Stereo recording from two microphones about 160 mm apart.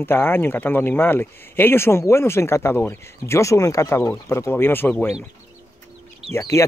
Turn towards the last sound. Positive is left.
turn(degrees=20)  # may be behind; listen again after turning